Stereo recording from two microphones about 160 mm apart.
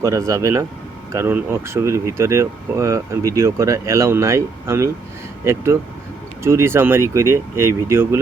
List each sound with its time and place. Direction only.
0.0 s speech: 20° right (ahead or behind)
6.4 s speech: 15° right (ahead or behind)